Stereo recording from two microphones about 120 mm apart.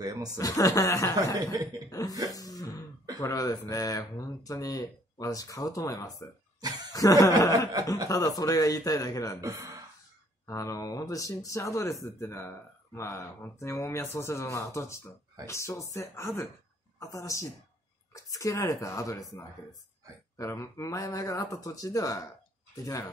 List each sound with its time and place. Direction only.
0.0 s speech: 30° right (ahead or behind)
0.4 s speech: 30° left (ahead or behind)
1.1 s speech: 30° right (ahead or behind)
1.9 s speech: 30° left (ahead or behind)
2.3 s throat clearing: 30° left (ahead or behind)
3.2 s speech: 30° left (ahead or behind)
6.6 s speech: 35° right (ahead or behind)
6.9 s snicker: 30° left (ahead or behind)
7.4 s speech: 30° left (ahead or behind)
9.4 s speech: 30° right (ahead or behind)
10.4 s speech: 25° left (ahead or behind)
20.3 s speech: 25° left (ahead or behind)